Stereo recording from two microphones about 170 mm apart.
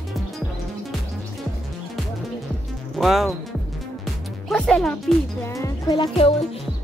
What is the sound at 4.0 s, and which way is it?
Music, centre (ahead or behind).